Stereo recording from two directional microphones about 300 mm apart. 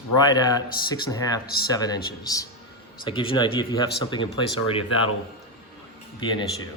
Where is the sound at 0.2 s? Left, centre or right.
Centre.